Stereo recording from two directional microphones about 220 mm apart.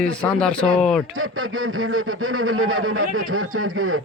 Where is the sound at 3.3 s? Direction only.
70° right (ahead or behind).